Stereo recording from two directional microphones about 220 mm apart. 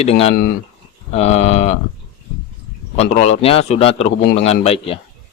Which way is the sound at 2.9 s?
30° left (ahead or behind).